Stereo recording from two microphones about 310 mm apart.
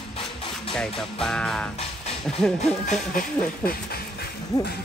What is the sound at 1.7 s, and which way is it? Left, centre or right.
Music, centre.